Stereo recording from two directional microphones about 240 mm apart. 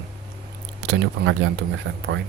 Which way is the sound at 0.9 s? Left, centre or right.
Right.